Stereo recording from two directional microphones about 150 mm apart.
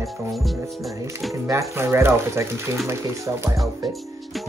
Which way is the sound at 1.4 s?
20° right (ahead or behind).